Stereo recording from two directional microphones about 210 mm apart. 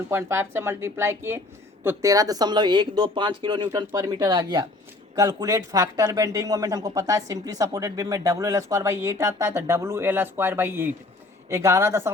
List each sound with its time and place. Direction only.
0.1 s speech: 10° right (ahead or behind)